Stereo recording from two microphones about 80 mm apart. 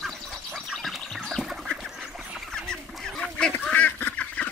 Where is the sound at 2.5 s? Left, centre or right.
Centre.